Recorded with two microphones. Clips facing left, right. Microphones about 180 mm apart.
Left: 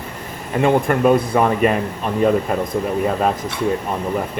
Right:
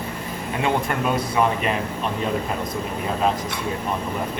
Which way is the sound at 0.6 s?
50° left (ahead or behind).